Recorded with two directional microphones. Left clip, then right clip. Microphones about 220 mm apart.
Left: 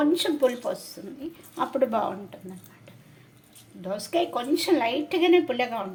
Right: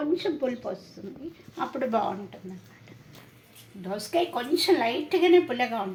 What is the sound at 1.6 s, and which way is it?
Speech, 30° left (ahead or behind).